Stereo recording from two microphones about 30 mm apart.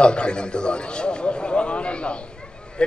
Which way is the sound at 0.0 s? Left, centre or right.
Left.